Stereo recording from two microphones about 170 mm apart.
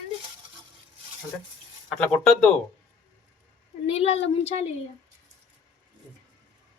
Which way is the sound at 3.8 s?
35° left (ahead or behind).